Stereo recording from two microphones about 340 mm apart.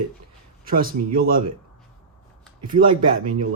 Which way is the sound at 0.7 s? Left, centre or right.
Right.